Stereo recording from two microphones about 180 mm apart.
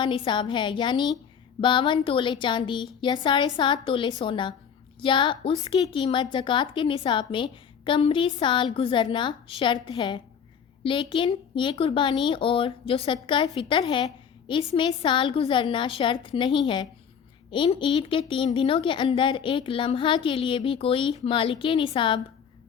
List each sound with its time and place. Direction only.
0.0 s a woman's voice: 25° left (ahead or behind)